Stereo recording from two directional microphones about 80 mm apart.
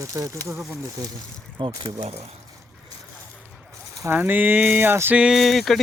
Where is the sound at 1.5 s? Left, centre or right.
Right.